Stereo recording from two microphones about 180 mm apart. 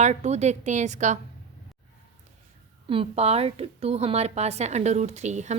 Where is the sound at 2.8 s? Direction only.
30° right (ahead or behind).